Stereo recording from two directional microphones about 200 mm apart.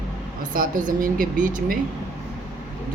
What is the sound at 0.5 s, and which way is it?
Speech, 40° right (ahead or behind).